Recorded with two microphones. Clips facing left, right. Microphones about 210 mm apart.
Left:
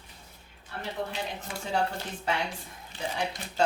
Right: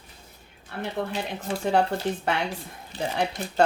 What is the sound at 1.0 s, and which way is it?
Speech, 60° right (ahead or behind).